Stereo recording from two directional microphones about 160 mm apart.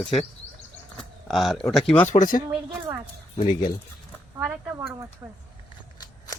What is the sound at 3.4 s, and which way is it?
Speech, 30° left (ahead or behind).